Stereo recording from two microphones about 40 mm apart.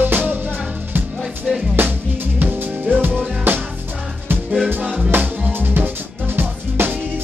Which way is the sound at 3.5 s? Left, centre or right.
Right.